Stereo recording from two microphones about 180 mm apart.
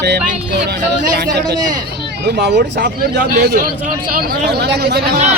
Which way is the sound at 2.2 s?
70° right (ahead or behind).